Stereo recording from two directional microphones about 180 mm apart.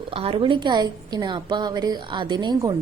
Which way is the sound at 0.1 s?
30° right (ahead or behind).